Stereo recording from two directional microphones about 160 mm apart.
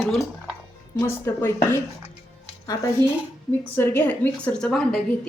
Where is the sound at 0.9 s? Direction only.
15° left (ahead or behind).